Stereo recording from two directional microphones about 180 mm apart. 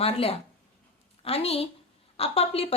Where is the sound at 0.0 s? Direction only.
35° left (ahead or behind).